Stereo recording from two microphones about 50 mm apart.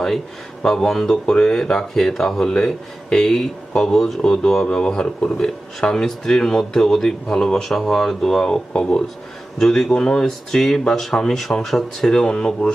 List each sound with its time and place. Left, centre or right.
0.6 s speech: centre
12.1 s speech: centre